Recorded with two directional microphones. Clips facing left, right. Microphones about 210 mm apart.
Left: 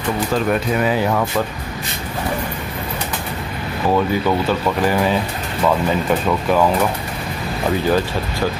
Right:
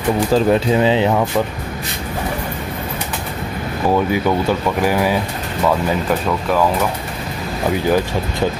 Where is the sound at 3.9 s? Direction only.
15° right (ahead or behind).